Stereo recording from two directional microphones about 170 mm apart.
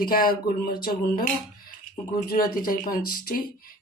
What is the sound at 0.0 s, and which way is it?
Speech, 60° left (ahead or behind).